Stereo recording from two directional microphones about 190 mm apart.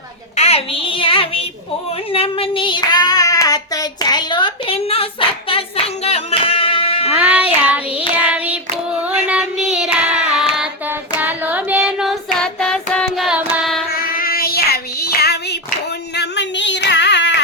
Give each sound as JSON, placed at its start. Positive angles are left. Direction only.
{"t": 0.3, "sound": "child singing", "side_deg": 35}
{"t": 5.5, "sound": "music", "side_deg": 30}
{"t": 7.2, "sound": "child singing", "side_deg": -5}
{"t": 13.9, "sound": "child singing", "side_deg": 50}
{"t": 16.1, "sound": "a sound", "side_deg": 65}